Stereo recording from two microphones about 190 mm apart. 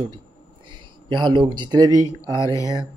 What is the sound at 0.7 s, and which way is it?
Speech, 25° right (ahead or behind).